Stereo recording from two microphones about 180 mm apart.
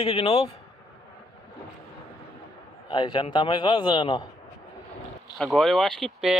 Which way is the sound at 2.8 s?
25° left (ahead or behind).